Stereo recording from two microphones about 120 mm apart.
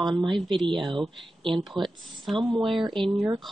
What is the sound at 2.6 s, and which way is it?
Speech, 45° right (ahead or behind).